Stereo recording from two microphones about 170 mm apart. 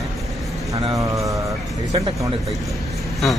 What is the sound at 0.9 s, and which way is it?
Speech, 20° right (ahead or behind).